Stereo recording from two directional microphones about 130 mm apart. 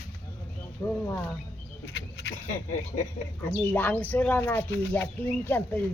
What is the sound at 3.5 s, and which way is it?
Speech, 15° left (ahead or behind).